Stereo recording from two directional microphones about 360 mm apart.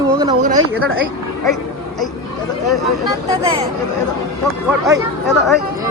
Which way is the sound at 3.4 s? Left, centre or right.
Centre.